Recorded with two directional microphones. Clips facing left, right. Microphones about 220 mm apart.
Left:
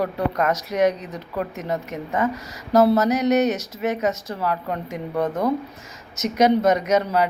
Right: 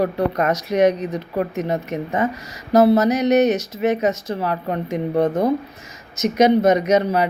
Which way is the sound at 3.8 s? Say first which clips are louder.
Right 4 dB; 20° right (ahead or behind).